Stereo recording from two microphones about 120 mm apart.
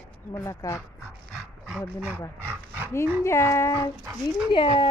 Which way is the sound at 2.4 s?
15° right (ahead or behind).